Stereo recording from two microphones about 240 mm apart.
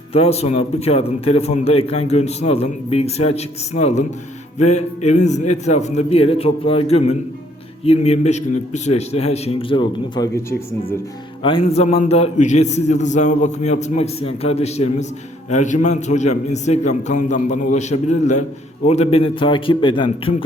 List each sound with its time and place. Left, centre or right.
0.1 s a man's voice: left
11.4 s a man's voice: left